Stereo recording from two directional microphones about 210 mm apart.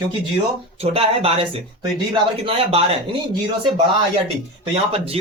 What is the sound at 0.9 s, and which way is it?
Speech, 30° right (ahead or behind).